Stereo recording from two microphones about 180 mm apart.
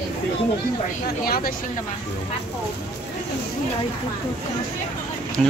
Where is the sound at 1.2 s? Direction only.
55° left (ahead or behind).